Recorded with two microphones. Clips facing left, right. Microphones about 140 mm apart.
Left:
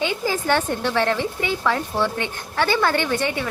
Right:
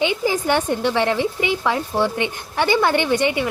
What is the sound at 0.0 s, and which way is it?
Speech, 20° right (ahead or behind).